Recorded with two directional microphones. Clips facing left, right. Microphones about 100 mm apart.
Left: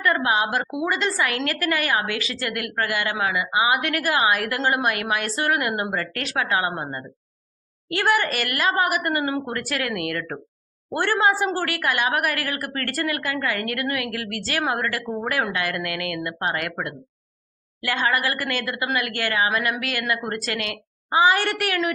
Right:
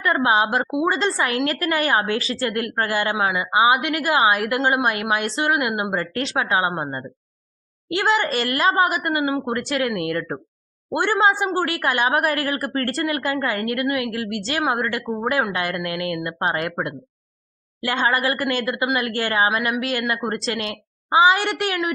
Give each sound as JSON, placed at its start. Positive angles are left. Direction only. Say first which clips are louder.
{"t": 0.0, "sound": "a woman's voice", "louder": "right 3 dB", "side_deg": -25}